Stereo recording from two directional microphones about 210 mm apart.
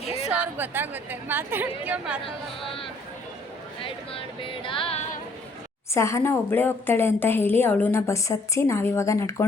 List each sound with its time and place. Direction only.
0.3 s a woman's voice: 10° right (ahead or behind)
2.2 s speech: 25° left (ahead or behind)
3.8 s speech: 25° left (ahead or behind)
5.9 s a woman's voice: 15° left (ahead or behind)